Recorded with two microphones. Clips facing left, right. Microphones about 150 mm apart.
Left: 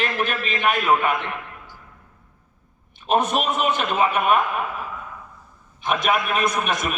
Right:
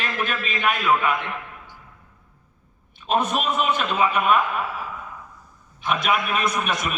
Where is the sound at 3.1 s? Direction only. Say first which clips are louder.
Left 2 dB; 50° left (ahead or behind).